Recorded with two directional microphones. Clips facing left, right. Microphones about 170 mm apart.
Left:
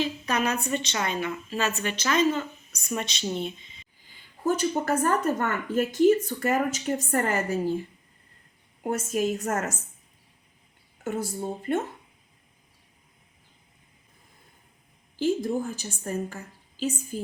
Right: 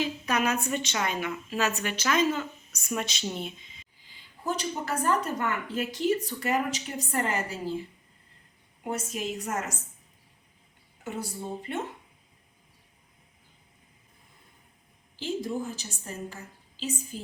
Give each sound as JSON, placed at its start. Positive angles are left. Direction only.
{"t": 0.0, "sound": "a woman's voice", "side_deg": -5}
{"t": 4.4, "sound": "a woman's voice", "side_deg": 50}
{"t": 8.8, "sound": "a woman's voice", "side_deg": 50}
{"t": 11.0, "sound": "a woman's voice", "side_deg": 50}
{"t": 15.2, "sound": "a woman's voice", "side_deg": 55}